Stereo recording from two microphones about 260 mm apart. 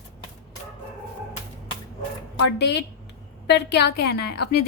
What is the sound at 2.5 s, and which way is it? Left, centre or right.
A woman's voice, left.